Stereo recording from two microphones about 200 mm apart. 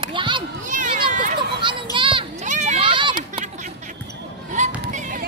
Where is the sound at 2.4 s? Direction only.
35° right (ahead or behind).